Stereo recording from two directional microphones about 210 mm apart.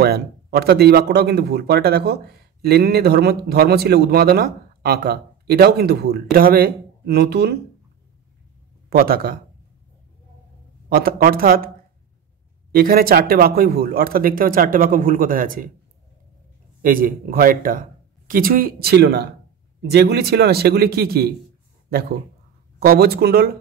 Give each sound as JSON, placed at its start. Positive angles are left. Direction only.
{"t": 0.0, "sound": "speech", "side_deg": -50}
{"t": 8.9, "sound": "speech", "side_deg": -45}
{"t": 10.9, "sound": "speech", "side_deg": -45}
{"t": 12.7, "sound": "speech", "side_deg": -45}
{"t": 16.8, "sound": "speech", "side_deg": -40}
{"t": 22.8, "sound": "speech", "side_deg": -50}